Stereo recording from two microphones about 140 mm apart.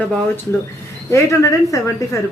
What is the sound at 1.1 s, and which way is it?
Speech, 20° left (ahead or behind).